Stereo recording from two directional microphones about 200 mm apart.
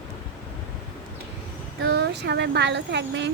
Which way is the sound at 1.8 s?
60° right (ahead or behind).